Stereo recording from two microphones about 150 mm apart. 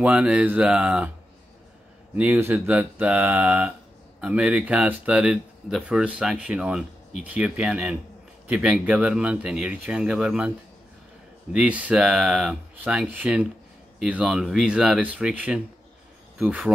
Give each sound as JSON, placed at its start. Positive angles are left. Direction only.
{"t": 0.0, "sound": "speech", "side_deg": -10}
{"t": 2.1, "sound": "speech", "side_deg": -10}
{"t": 11.5, "sound": "speech", "side_deg": -10}